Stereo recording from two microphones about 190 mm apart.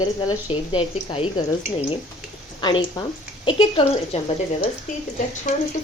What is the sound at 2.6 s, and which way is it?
Speech, 25° left (ahead or behind).